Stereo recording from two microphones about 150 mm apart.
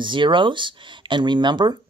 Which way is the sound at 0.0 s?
35° right (ahead or behind).